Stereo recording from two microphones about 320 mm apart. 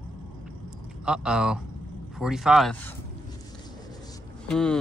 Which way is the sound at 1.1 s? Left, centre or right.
Centre.